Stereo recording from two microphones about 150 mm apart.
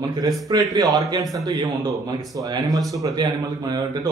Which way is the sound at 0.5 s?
25° right (ahead or behind).